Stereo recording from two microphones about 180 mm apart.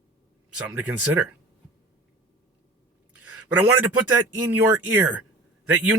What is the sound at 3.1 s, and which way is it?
Speech, 10° right (ahead or behind).